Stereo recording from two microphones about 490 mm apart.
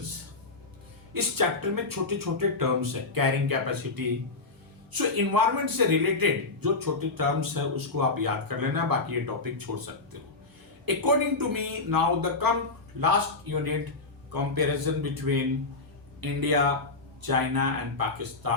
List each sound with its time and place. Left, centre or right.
1.1 s a man's voice: right
15.3 s a man's voice: right